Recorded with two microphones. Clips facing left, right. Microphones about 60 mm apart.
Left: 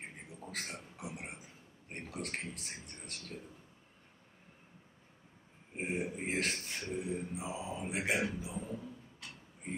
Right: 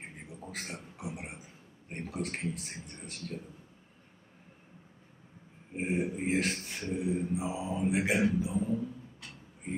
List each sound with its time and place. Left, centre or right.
0.5 s speech: centre
1.9 s mantra: centre
5.8 s mantra: centre